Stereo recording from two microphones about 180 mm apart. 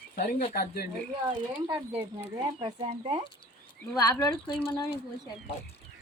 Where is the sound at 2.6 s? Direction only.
35° right (ahead or behind).